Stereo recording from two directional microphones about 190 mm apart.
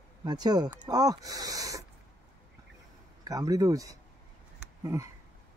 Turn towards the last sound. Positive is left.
turn(degrees=-15)  # may be behind; listen again after turning